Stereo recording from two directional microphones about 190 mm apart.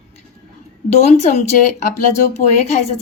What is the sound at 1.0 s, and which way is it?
Speech, 35° left (ahead or behind).